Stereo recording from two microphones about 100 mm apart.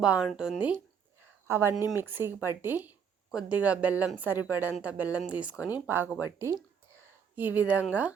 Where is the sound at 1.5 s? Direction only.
25° right (ahead or behind).